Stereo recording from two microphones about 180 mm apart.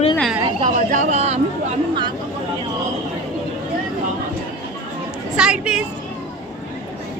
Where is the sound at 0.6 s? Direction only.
45° right (ahead or behind).